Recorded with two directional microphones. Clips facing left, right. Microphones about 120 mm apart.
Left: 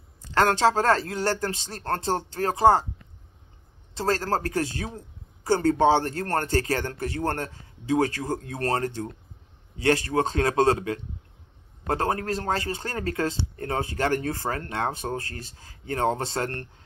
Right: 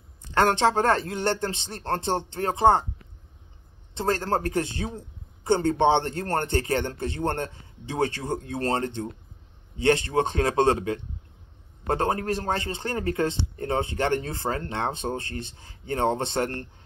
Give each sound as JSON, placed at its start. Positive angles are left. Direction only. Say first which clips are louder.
{"t": 0.2, "sound": "a man's voice", "louder": "even", "side_deg": -20}
{"t": 3.9, "sound": "a man's voice", "louder": "even", "side_deg": -20}